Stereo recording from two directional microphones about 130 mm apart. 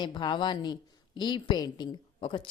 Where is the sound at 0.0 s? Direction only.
35° left (ahead or behind).